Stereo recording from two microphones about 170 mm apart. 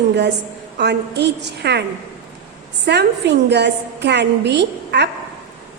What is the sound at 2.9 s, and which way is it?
A woman's voice, 85° right.